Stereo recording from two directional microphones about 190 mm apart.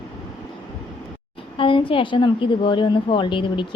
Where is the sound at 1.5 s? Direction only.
25° left (ahead or behind).